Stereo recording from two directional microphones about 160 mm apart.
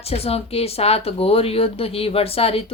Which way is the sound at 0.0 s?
40° left (ahead or behind).